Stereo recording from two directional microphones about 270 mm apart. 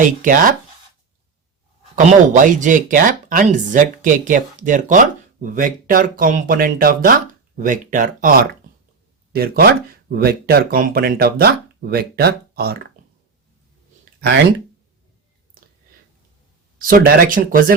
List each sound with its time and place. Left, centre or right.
0.2 s speech: right
2.0 s speech: right
16.7 s speech: right